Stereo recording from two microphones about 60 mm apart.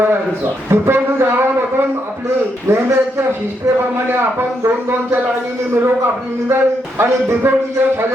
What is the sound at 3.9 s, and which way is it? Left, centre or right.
A man's voice, right.